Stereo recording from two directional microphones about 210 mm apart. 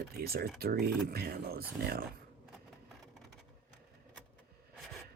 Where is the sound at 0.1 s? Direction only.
45° right (ahead or behind).